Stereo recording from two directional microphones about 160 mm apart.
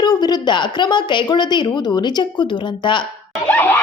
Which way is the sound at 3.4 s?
10° left (ahead or behind).